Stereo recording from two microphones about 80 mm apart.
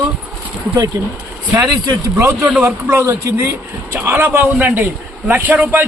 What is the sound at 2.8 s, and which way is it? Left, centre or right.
Speech, right.